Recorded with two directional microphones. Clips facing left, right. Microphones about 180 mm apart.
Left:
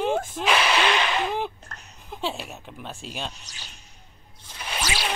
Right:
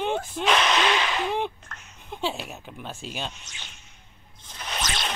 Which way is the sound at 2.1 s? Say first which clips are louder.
Right 1 dB; centre (ahead or behind).